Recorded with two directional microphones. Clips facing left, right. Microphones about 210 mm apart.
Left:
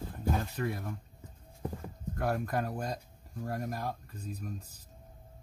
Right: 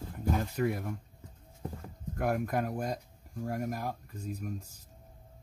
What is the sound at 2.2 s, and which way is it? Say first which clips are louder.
Speech: right 2 dB; 15° right (ahead or behind).